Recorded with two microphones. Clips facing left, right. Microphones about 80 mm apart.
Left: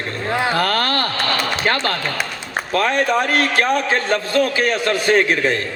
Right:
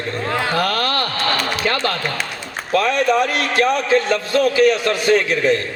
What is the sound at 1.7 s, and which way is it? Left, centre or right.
A man's voice, left.